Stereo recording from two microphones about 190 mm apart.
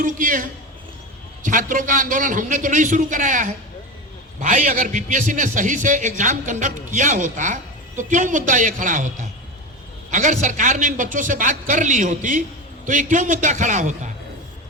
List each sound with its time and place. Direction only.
0.0 s a man's voice: 45° right (ahead or behind)
1.5 s a man's voice: 40° right (ahead or behind)